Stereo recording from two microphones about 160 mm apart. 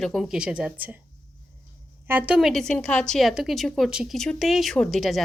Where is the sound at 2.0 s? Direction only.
10° right (ahead or behind).